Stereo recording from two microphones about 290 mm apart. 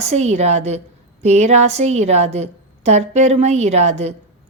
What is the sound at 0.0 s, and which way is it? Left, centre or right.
A woman's voice, right.